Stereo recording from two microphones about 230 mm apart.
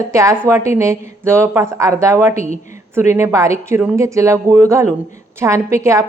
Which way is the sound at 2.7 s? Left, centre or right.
Centre.